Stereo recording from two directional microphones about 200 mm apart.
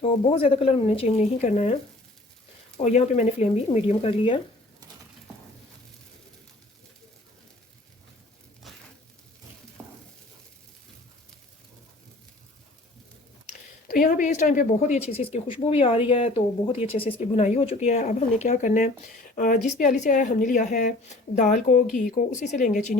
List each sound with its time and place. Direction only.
0.0 s speech: 30° left (ahead or behind)
2.7 s speech: 35° left (ahead or behind)
8.7 s a sound: centre (ahead or behind)
13.5 s speech: 40° left (ahead or behind)